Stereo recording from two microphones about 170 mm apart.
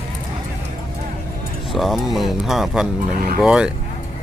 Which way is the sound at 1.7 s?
Centre (ahead or behind).